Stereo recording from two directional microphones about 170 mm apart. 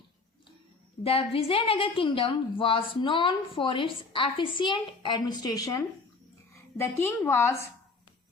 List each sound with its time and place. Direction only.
1.0 s a woman's voice: 35° left (ahead or behind); by 7.6 s 15° left (ahead or behind)